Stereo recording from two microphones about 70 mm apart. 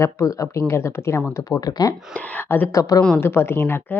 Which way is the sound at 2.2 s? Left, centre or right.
Left.